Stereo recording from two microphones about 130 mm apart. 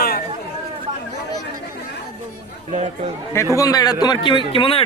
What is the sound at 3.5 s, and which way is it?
A man's voice, 30° left (ahead or behind).